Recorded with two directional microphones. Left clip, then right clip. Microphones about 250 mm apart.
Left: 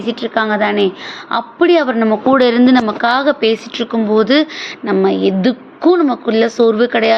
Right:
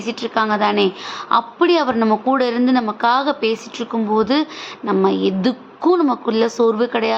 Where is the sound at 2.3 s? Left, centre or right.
Centre.